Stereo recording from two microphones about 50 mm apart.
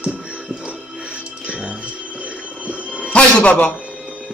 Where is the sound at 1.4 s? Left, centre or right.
Right.